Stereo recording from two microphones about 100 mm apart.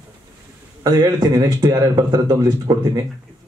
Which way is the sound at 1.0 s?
40° right (ahead or behind).